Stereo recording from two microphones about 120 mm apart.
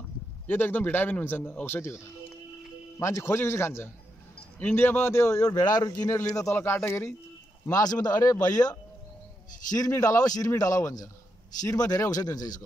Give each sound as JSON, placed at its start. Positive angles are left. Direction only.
{"t": 0.5, "sound": "a man's voice", "side_deg": 15}
{"t": 3.0, "sound": "speech", "side_deg": 20}
{"t": 5.6, "sound": "speech", "side_deg": 35}
{"t": 7.6, "sound": "speech", "side_deg": 30}
{"t": 9.8, "sound": "speech", "side_deg": 30}